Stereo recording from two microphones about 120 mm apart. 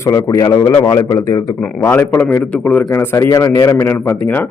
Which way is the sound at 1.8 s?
20° left (ahead or behind).